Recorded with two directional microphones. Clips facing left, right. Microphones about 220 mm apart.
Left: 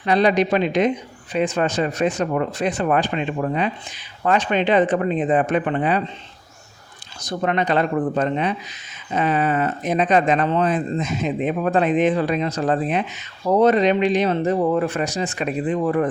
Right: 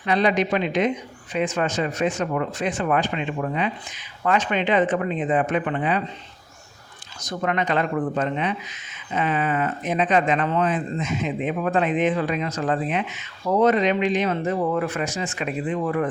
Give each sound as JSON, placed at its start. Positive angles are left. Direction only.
{"t": 0.0, "sound": "speech", "side_deg": 35}
{"t": 7.2, "sound": "speech", "side_deg": 35}